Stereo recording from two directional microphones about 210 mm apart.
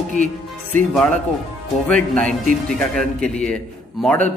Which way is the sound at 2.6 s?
5° left (ahead or behind).